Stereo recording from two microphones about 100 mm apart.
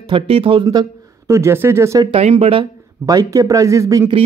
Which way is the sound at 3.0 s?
35° right (ahead or behind).